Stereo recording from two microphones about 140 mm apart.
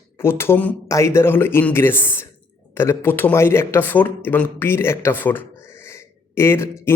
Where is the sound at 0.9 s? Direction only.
20° left (ahead or behind).